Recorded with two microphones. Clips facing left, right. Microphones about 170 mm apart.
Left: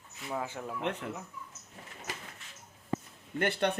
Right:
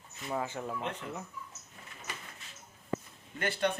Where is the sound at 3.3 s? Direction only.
60° left (ahead or behind).